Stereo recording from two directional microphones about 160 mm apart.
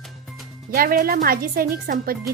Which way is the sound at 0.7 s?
70° right (ahead or behind).